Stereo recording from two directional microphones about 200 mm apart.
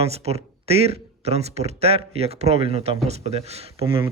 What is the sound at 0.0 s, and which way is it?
Speech, 30° right (ahead or behind).